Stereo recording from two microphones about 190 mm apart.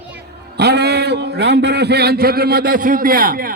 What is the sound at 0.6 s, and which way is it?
A man's voice, 60° right (ahead or behind).